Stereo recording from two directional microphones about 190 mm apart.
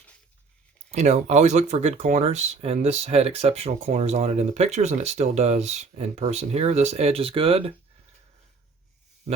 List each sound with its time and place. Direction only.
0.9 s speech: 35° right (ahead or behind)